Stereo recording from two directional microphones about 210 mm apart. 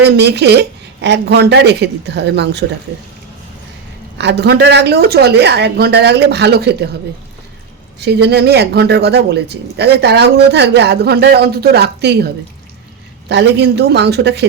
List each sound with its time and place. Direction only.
0.0 s speech: 50° right (ahead or behind)
4.2 s speech: 55° right (ahead or behind)
7.9 s speech: 50° right (ahead or behind)